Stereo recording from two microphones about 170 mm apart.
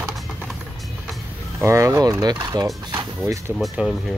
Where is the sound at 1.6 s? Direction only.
15° right (ahead or behind).